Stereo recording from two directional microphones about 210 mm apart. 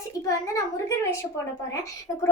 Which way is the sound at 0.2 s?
15° left (ahead or behind).